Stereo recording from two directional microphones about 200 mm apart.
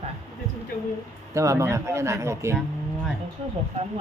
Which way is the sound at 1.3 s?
15° right (ahead or behind).